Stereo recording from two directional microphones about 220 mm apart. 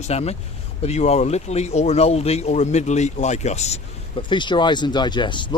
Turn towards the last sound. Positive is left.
turn(degrees=20)  # may be behind; listen again after turning